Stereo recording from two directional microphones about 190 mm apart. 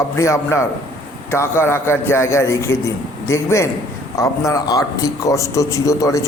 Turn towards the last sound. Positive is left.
turn(degrees=15)  # may be behind; listen again after turning